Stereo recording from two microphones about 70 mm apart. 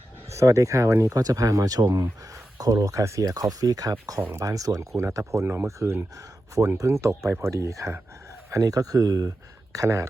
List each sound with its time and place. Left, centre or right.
0.3 s speech: right
2.6 s speech: right
4.2 s speech: right
4.4 s speech: right
4.9 s speech: right